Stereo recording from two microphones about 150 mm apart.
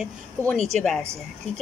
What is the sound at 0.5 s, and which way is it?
Speech, 50° right (ahead or behind).